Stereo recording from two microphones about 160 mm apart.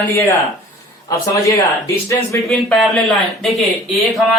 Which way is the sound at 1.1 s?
20° left (ahead or behind).